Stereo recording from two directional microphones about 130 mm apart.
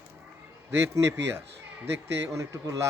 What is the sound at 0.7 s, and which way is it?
Speech, 20° right (ahead or behind).